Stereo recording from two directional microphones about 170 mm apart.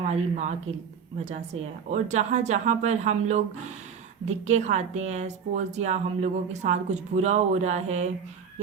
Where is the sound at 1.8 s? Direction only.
40° right (ahead or behind).